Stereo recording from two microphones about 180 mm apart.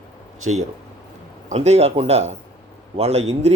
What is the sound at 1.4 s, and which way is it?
A man's voice, 35° right (ahead or behind).